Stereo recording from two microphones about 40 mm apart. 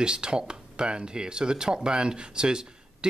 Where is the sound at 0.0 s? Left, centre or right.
Right.